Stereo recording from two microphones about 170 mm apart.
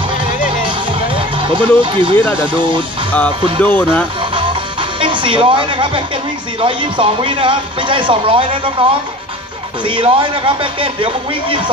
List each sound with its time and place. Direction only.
0.7 s music: 30° right (ahead or behind)
2.1 s speech: 15° left (ahead or behind)
2.4 s speech: 30° right (ahead or behind)
3.6 s speech: 10° left (ahead or behind)
4.2 s music: 30° right (ahead or behind)
5.0 s a woman's voice: 30° right (ahead or behind)